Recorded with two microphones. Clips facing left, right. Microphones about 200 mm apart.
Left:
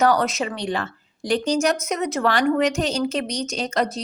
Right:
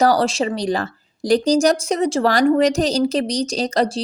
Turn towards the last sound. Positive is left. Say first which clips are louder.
# right 4 dB
turn(degrees=-35)  # may be behind; listen again after turning